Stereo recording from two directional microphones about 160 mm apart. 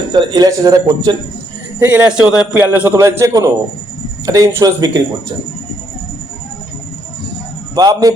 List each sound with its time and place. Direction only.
0.1 s speech: 30° right (ahead or behind)
1.8 s a man's voice: 10° right (ahead or behind)
7.8 s speech: 25° right (ahead or behind)